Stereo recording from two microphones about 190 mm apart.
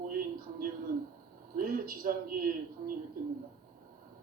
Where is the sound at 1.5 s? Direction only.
50° right (ahead or behind).